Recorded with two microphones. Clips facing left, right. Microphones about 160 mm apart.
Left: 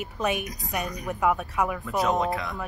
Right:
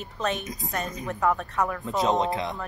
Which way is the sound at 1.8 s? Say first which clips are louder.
Right 2 dB; 25° right (ahead or behind).